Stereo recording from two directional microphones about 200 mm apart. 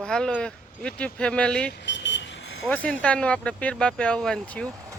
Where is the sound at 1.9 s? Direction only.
65° left (ahead or behind).